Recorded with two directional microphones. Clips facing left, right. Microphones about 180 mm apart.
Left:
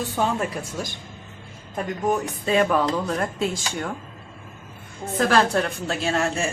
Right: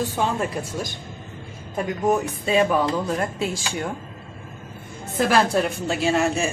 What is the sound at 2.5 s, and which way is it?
Speech, 10° right (ahead or behind).